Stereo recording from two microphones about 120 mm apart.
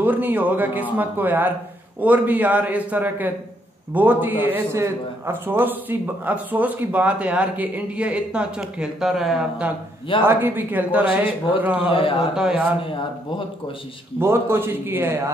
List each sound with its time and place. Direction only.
0.0 s a man's voice: 15° right (ahead or behind)
10.2 s a man's voice: 15° right (ahead or behind)
11.9 s a man's voice: 50° left (ahead or behind)
12.4 s a man's voice: 10° right (ahead or behind)
14.2 s a man's voice: 20° right (ahead or behind)